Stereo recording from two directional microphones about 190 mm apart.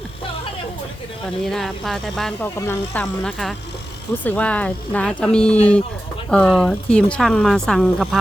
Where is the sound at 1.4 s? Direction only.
Centre (ahead or behind).